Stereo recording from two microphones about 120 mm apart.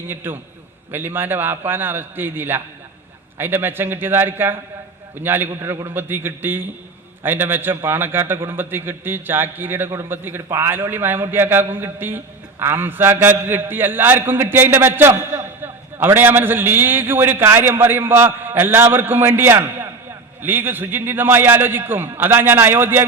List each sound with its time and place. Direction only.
0.1 s a man's voice: 20° right (ahead or behind)